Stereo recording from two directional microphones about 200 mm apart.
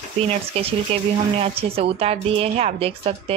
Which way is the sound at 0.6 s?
30° right (ahead or behind).